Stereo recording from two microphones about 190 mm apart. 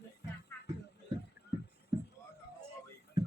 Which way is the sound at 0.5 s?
15° left (ahead or behind).